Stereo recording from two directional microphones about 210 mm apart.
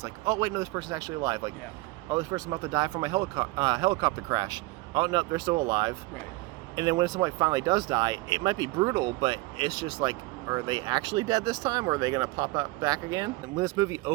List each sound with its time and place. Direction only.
0.0 s speech: 20° right (ahead or behind)